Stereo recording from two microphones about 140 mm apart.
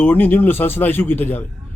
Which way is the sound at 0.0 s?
15° left (ahead or behind).